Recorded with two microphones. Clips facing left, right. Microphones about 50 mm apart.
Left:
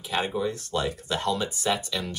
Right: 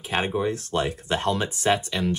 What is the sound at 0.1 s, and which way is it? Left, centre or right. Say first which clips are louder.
Speech: right 3 dB; right.